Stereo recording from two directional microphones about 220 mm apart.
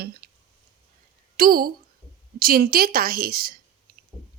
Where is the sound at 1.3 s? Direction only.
40° right (ahead or behind).